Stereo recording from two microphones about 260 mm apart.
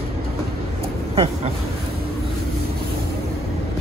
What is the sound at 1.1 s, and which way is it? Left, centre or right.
Speech, right.